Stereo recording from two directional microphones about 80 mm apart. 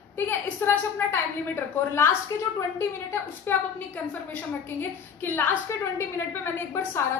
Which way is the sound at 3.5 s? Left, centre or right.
Centre.